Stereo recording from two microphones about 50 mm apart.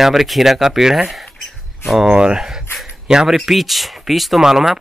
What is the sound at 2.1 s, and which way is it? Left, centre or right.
Speech, centre.